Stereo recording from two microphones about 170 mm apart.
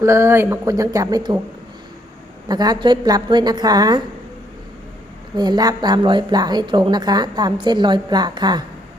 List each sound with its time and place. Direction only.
0.0 s speech: 15° right (ahead or behind)
2.5 s speech: 25° right (ahead or behind)
5.4 s speech: 25° right (ahead or behind)